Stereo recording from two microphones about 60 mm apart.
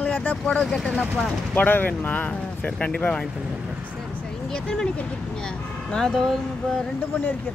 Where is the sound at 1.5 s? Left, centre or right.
Left; by 3.3 s centre.